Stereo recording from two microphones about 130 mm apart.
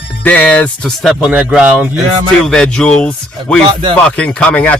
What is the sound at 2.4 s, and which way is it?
Speech, 5° left (ahead or behind).